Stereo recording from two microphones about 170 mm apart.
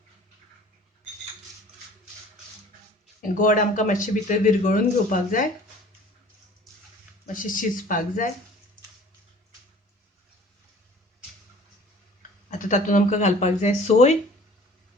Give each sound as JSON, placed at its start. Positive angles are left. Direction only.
{"t": 3.2, "sound": "speech", "side_deg": 50}
{"t": 7.3, "sound": "speech", "side_deg": 50}
{"t": 12.5, "sound": "speech", "side_deg": 45}